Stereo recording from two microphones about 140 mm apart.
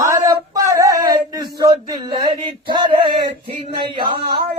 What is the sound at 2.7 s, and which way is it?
Male singing, 35° right (ahead or behind).